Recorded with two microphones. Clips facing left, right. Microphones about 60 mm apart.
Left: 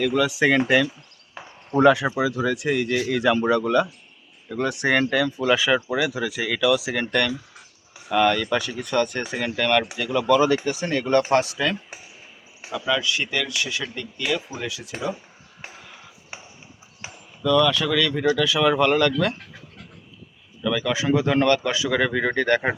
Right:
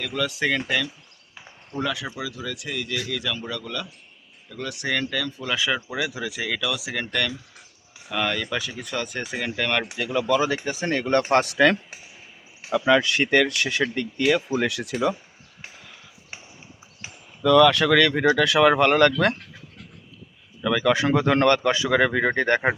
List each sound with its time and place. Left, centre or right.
0.0 s speech: centre
1.7 s speech: left
5.2 s speech: centre
8.1 s speech: centre
10.7 s speech: right
12.7 s speech: right
17.4 s speech: right
20.6 s speech: right